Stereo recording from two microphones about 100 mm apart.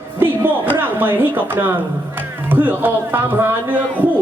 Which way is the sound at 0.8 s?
20° right (ahead or behind).